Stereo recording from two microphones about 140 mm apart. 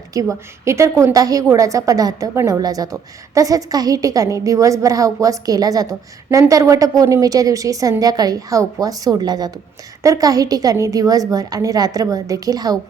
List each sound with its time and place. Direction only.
0.1 s a woman's voice: 25° right (ahead or behind)